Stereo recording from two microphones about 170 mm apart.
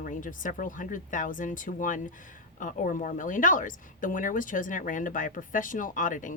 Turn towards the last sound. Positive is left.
turn(degrees=50)  # may be behind; listen again after turning